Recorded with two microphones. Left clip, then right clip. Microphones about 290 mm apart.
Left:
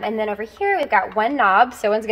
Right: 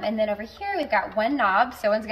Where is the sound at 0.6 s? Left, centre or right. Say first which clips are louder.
Left 7 dB; centre.